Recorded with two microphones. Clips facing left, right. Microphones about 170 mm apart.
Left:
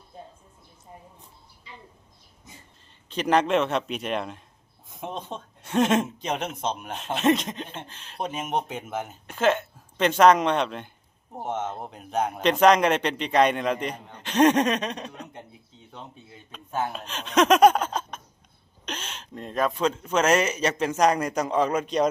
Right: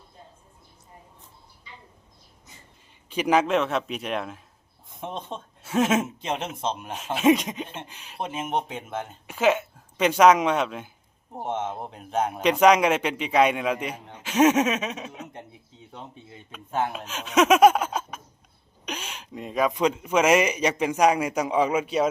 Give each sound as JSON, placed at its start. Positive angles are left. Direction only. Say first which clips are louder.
{"t": 3.1, "sound": "speech", "louder": "even", "side_deg": -10}
{"t": 8.3, "sound": "speech", "louder": "right 1 dB", "side_deg": -25}
{"t": 8.5, "sound": "speech", "louder": "even", "side_deg": 5}
{"t": 9.2, "sound": "a man's voice", "louder": "right 1 dB", "side_deg": -10}
{"t": 16.9, "sound": "a man's voice", "louder": "even", "side_deg": -5}